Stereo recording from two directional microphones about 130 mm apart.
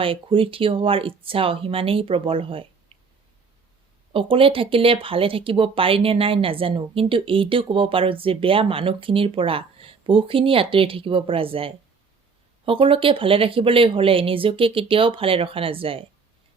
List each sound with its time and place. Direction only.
0.0 s speech: 45° right (ahead or behind)
4.1 s speech: 45° right (ahead or behind)